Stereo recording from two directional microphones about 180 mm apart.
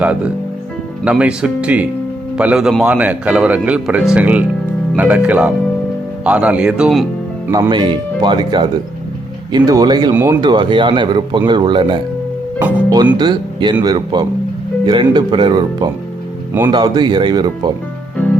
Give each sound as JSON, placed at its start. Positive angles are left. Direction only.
{"t": 0.0, "sound": "speech", "side_deg": -10}
{"t": 7.5, "sound": "a man's voice", "side_deg": -25}
{"t": 13.1, "sound": "a man's voice", "side_deg": -25}
{"t": 16.5, "sound": "speech", "side_deg": -15}
{"t": 16.7, "sound": "a man's voice", "side_deg": -25}